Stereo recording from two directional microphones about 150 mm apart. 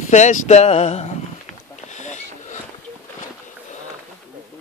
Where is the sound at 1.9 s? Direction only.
55° left (ahead or behind).